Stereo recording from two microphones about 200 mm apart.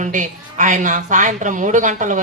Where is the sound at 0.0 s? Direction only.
40° right (ahead or behind).